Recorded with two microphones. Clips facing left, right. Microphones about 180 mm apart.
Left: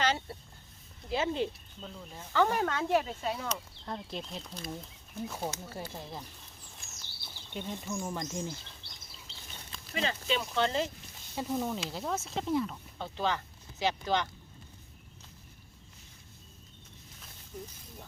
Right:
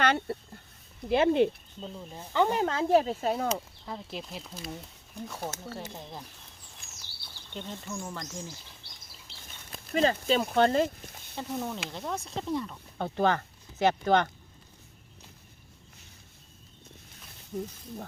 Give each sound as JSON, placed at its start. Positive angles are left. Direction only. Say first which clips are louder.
{"t": 0.0, "sound": "speech", "louder": "right 4 dB", "side_deg": -60}
{"t": 1.8, "sound": "speech", "louder": "right 4 dB", "side_deg": -20}
{"t": 3.5, "sound": "speech", "louder": "right 4 dB", "side_deg": -5}
{"t": 7.5, "sound": "speech", "louder": "left 1 dB", "side_deg": 10}
{"t": 9.9, "sound": "speech", "louder": "right 7 dB", "side_deg": -40}
{"t": 10.4, "sound": "speech", "louder": "right 7 dB", "side_deg": -55}
{"t": 11.3, "sound": "speech", "louder": "left 1 dB", "side_deg": 5}
{"t": 13.0, "sound": "speech", "louder": "right 6 dB", "side_deg": -55}
{"t": 17.5, "sound": "speech", "louder": "right 9 dB", "side_deg": -50}